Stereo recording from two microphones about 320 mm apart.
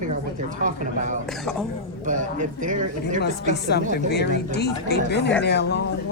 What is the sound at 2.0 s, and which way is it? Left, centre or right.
Speech, right.